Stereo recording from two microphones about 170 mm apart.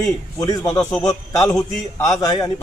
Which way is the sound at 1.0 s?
20° left (ahead or behind).